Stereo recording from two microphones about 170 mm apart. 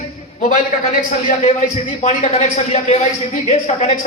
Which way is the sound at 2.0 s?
40° left (ahead or behind).